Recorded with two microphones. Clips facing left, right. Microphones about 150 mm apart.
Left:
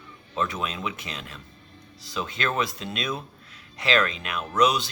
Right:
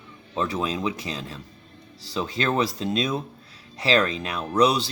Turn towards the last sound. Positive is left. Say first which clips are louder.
# right 2 dB
turn(degrees=-30)  # may be behind; listen again after turning